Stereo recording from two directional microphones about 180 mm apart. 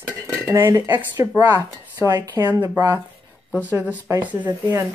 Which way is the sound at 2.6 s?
20° right (ahead or behind).